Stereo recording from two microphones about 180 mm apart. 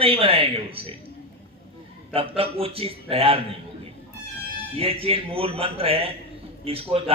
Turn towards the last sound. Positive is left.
turn(degrees=-30)  # may be behind; listen again after turning